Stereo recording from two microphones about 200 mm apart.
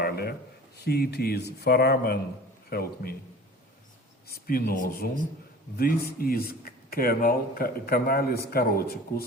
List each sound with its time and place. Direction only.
0.0 s a sound: 50° left (ahead or behind)
0.9 s speech: 50° left (ahead or behind)
4.3 s speech: 50° left (ahead or behind)